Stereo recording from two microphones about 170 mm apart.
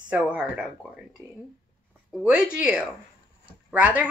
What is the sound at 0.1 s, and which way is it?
Speech, 5° right (ahead or behind).